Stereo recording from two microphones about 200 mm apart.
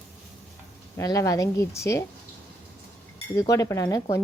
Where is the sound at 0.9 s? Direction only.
15° left (ahead or behind).